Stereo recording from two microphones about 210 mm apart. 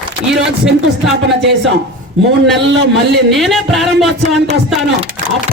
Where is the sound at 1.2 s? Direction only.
55° right (ahead or behind).